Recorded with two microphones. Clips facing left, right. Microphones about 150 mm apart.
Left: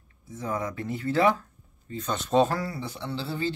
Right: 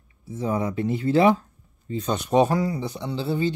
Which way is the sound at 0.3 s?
20° right (ahead or behind).